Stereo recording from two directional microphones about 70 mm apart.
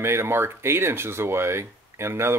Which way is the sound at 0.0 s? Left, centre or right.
Right.